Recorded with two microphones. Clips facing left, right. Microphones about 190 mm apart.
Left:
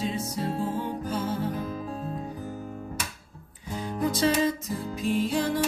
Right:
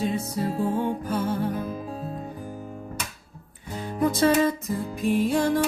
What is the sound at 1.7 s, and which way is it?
Music, 5° right (ahead or behind).